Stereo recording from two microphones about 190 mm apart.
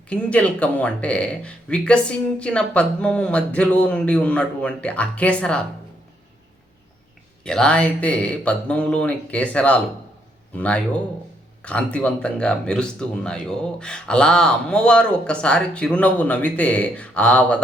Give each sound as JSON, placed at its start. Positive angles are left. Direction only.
{"t": 0.1, "sound": "speech", "side_deg": 5}
{"t": 7.4, "sound": "speech", "side_deg": 5}